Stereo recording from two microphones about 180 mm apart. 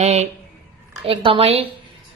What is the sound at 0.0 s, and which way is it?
A woman's voice, 35° right (ahead or behind).